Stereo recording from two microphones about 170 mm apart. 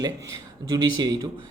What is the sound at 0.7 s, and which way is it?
Speech, 25° right (ahead or behind).